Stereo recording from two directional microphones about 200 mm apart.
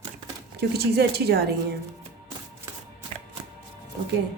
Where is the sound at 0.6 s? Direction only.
55° right (ahead or behind).